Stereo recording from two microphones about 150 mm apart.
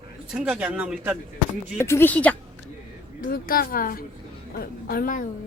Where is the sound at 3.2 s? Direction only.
70° left (ahead or behind).